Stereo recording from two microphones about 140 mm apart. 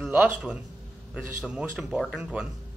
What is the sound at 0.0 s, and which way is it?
A man's voice, 10° right (ahead or behind).